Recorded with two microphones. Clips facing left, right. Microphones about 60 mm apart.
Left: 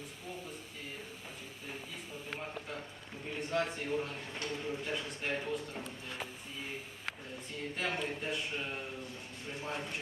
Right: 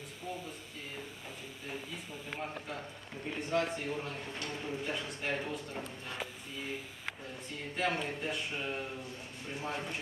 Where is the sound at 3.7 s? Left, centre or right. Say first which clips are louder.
Left 1 dB; centre.